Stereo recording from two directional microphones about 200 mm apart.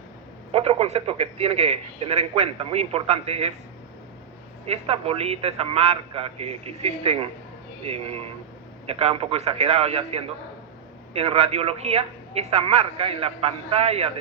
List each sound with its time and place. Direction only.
0.5 s a man's voice: 30° right (ahead or behind)
4.6 s a man's voice: 30° right (ahead or behind)